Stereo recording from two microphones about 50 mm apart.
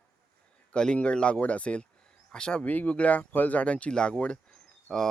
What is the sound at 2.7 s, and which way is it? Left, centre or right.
Speech, left.